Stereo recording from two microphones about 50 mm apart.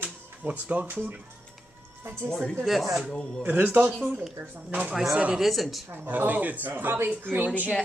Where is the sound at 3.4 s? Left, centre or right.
Right.